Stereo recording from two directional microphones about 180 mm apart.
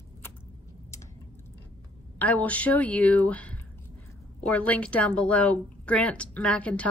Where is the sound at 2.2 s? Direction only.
10° left (ahead or behind).